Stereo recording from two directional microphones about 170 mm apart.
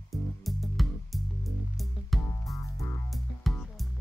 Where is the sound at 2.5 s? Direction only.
20° left (ahead or behind).